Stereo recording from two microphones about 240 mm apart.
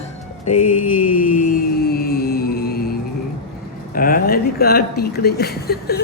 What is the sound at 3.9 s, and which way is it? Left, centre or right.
Speech, left.